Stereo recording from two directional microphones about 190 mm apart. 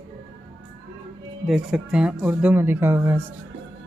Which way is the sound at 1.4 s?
Centre (ahead or behind).